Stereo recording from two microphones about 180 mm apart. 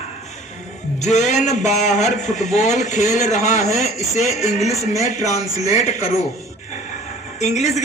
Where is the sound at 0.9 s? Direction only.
40° left (ahead or behind).